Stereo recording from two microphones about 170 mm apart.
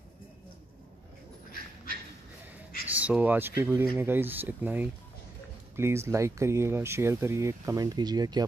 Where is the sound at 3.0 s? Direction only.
10° right (ahead or behind); by 8.4 s 25° right (ahead or behind).